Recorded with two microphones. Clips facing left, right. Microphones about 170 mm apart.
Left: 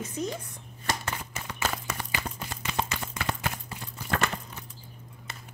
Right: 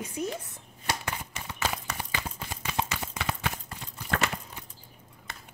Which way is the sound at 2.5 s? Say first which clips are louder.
Even; 10° right (ahead or behind).